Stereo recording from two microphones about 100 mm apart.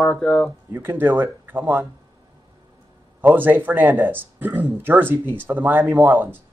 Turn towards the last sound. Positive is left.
turn(degrees=-20)  # may be behind; listen again after turning